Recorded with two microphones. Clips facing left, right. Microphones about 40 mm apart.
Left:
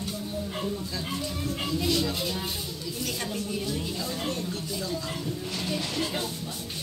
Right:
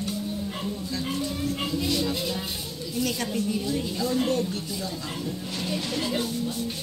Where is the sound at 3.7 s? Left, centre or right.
Right.